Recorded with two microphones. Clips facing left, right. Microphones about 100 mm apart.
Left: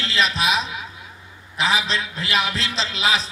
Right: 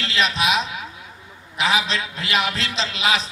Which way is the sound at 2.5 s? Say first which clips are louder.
Even; 35° left (ahead or behind).